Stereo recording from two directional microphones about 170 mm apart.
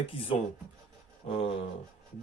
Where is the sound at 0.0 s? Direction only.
35° left (ahead or behind).